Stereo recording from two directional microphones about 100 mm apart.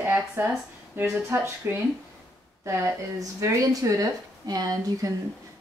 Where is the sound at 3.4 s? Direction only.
30° right (ahead or behind).